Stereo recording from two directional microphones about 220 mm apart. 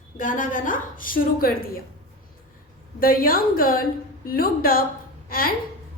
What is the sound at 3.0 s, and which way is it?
A woman's voice, 40° left (ahead or behind).